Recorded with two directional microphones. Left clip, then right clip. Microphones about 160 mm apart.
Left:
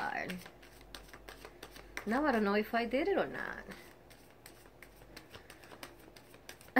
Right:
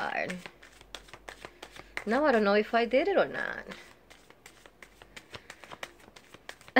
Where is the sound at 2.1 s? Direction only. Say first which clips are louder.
Right 7 dB; 20° right (ahead or behind).